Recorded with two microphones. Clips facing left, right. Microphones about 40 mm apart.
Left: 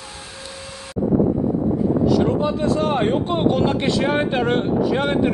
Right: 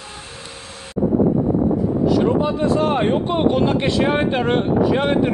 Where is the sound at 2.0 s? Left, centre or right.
Centre.